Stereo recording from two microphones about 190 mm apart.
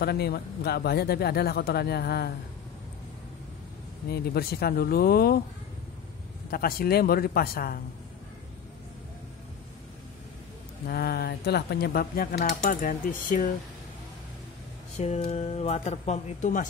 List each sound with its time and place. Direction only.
0.0 s speech: 55° left (ahead or behind)
4.1 s speech: 55° left (ahead or behind)
6.5 s speech: 50° left (ahead or behind)
10.9 s speech: 55° left (ahead or behind)
15.0 s speech: 35° left (ahead or behind)